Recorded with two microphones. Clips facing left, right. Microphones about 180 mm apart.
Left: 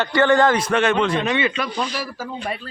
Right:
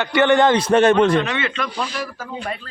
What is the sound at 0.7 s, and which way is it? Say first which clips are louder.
Speech: right 5 dB; 40° right (ahead or behind).